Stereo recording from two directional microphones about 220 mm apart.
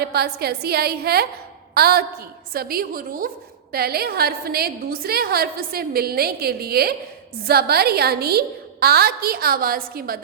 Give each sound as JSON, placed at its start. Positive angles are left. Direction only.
{"t": 0.0, "sound": "a woman's voice", "side_deg": -45}